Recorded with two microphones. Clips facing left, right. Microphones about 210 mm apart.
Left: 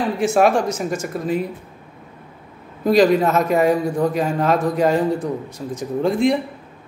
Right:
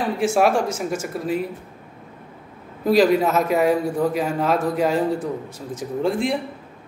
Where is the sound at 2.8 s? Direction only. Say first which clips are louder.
Left 2 dB; 5° right (ahead or behind).